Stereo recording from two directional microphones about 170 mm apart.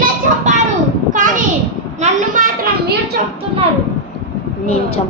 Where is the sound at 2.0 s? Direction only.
50° right (ahead or behind).